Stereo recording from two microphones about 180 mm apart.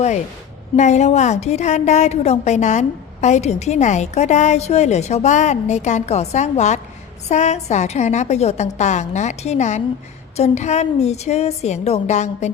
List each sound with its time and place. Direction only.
0.8 s a woman's voice: 40° left (ahead or behind)